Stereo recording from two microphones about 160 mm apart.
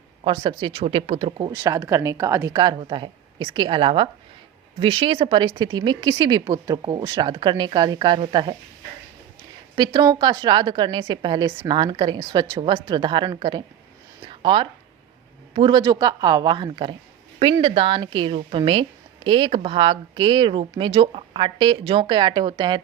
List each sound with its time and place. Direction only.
0.3 s a woman's voice: 30° right (ahead or behind)
1.5 s a woman's voice: 20° right (ahead or behind)
9.7 s a woman's voice: 30° right (ahead or behind)